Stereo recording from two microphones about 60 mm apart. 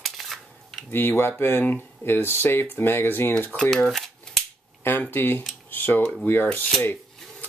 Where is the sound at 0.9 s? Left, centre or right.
Left.